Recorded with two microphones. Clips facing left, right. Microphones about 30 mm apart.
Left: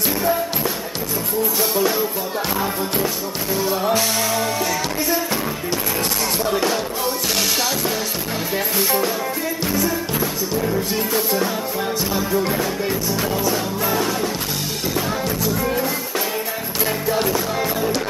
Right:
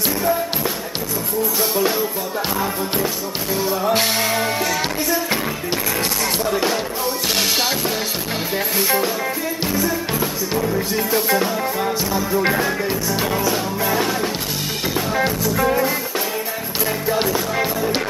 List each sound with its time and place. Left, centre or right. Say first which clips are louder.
1.6 s music: even; centre
3.9 s music: right 1 dB; right
4.4 s music: right 1 dB; right
10.6 s music: right 1 dB; centre
13.3 s music: right 1 dB; centre